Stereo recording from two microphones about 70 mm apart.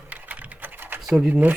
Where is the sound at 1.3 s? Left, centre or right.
Right.